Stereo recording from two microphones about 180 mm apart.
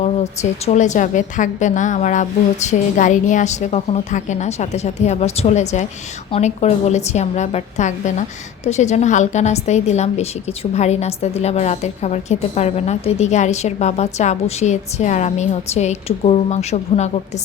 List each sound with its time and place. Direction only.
0.0 s a woman's voice: 35° left (ahead or behind)